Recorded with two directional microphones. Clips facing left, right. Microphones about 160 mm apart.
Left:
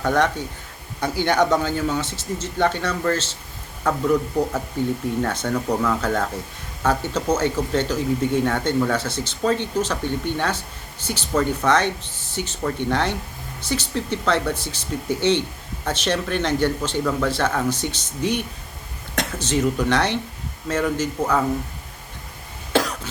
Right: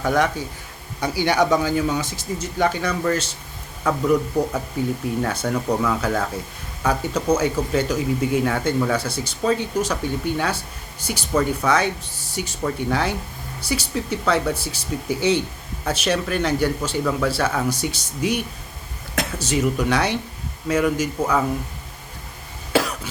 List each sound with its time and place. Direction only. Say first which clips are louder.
0.0 s speech: even; 10° right (ahead or behind)
4.8 s speech: left 1 dB; 10° right (ahead or behind)
22.7 s cough: even; 10° right (ahead or behind)